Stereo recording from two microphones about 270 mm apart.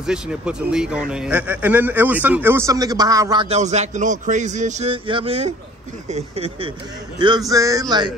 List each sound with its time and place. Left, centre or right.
0.0 s a man's voice: centre